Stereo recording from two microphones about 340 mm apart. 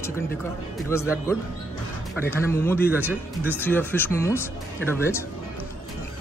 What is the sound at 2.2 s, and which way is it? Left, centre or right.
Speech, centre.